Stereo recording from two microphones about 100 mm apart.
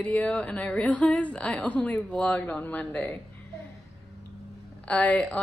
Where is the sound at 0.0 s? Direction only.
15° left (ahead or behind).